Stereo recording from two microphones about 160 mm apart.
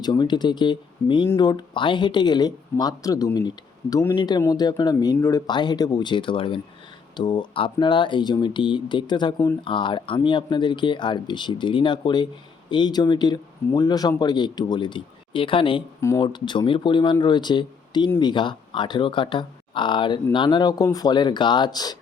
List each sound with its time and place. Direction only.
0.0 s speech: 30° left (ahead or behind)
16.0 s speech: 20° left (ahead or behind)
16.2 s speech: 30° left (ahead or behind)